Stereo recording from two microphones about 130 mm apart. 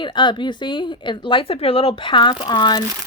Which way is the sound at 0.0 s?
35° left (ahead or behind).